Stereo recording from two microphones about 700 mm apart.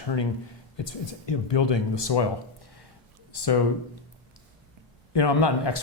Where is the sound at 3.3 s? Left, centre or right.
Left.